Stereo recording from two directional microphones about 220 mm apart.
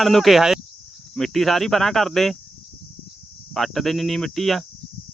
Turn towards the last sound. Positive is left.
turn(degrees=0)  # may be behind; listen again after turning